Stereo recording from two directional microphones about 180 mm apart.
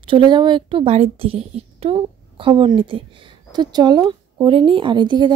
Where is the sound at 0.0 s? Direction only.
25° right (ahead or behind).